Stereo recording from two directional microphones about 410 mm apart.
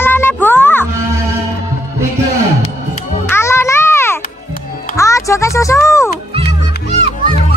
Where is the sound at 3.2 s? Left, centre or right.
Centre.